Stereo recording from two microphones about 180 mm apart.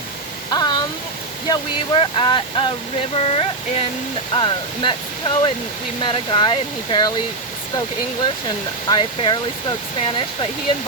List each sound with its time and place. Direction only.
0.5 s a sound: 20° left (ahead or behind)
1.5 s speech: 25° left (ahead or behind)
8.2 s speech: 25° left (ahead or behind)